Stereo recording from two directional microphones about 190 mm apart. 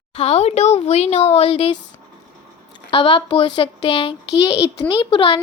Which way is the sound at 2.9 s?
30° left (ahead or behind).